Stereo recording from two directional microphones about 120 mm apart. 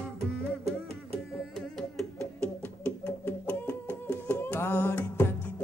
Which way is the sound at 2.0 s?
10° left (ahead or behind).